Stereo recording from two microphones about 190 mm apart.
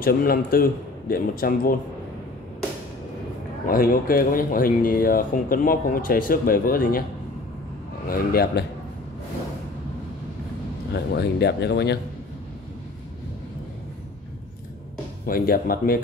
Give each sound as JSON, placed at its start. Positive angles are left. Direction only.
{"t": 0.0, "sound": "speech", "side_deg": 50}
{"t": 3.6, "sound": "speech", "side_deg": 50}
{"t": 8.1, "sound": "speech", "side_deg": 50}
{"t": 10.9, "sound": "speech", "side_deg": 60}
{"t": 15.2, "sound": "speech", "side_deg": 50}